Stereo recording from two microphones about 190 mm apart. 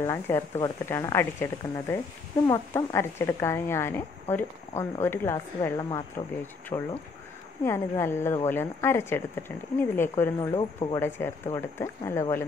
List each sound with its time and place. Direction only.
0.0 s speech: 15° left (ahead or behind)